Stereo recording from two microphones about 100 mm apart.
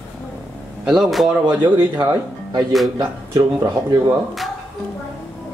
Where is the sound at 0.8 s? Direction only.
5° right (ahead or behind).